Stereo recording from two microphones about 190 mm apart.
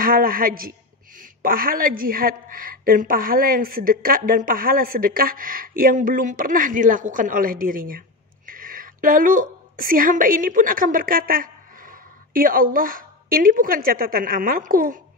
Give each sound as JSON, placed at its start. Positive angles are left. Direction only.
{"t": 0.0, "sound": "a man's voice", "side_deg": -50}